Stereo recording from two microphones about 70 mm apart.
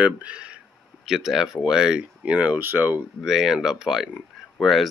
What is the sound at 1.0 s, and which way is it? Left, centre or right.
Speech, centre.